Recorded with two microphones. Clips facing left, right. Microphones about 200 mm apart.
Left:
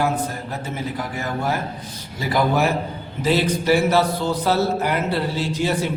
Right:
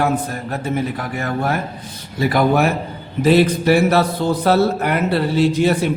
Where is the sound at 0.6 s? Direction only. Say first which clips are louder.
Right 7 dB; 60° right (ahead or behind).